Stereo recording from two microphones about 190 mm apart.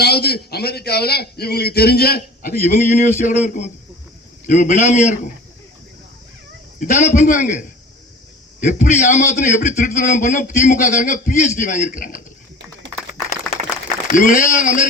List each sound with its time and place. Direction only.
0.0 s a man's voice: 55° left (ahead or behind)
2.6 s a man's voice: 35° left (ahead or behind)
4.4 s a man's voice: 40° left (ahead or behind)
6.7 s a man's voice: 45° left (ahead or behind)
8.6 s a man's voice: 40° left (ahead or behind)
14.1 s speech: 40° left (ahead or behind)